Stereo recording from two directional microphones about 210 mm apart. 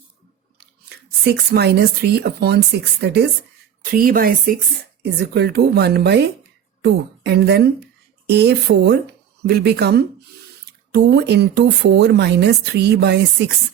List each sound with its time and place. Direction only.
0.9 s speech: 50° right (ahead or behind)